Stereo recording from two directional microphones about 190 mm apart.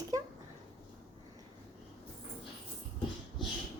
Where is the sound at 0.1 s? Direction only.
20° right (ahead or behind).